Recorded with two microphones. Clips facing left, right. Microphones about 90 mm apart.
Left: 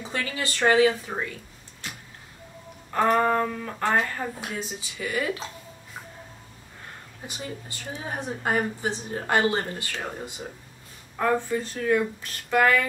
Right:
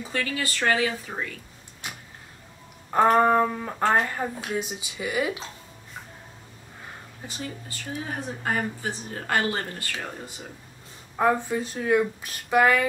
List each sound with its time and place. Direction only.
0.1 s a woman's voice: 20° left (ahead or behind)
1.8 s a sound: 15° right (ahead or behind)
2.9 s speech: 20° right (ahead or behind)
7.2 s a woman's voice: 20° left (ahead or behind)
11.1 s speech: 15° right (ahead or behind)